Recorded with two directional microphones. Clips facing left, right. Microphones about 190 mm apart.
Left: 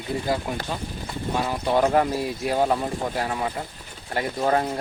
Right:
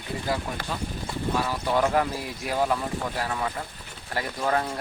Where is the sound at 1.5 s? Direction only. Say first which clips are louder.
Left 5 dB; 25° left (ahead or behind).